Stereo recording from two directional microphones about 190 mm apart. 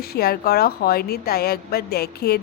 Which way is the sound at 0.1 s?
55° left (ahead or behind).